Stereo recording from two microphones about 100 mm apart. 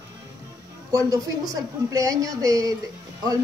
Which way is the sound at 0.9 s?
40° right (ahead or behind).